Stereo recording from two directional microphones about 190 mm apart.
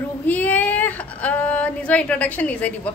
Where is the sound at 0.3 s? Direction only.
10° left (ahead or behind).